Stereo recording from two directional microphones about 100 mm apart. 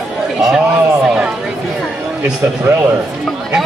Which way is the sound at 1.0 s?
5° right (ahead or behind).